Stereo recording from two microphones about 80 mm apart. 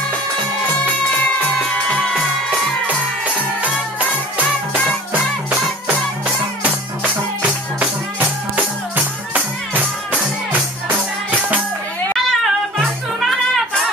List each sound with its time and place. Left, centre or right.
8.5 s music: right
12.3 s music: centre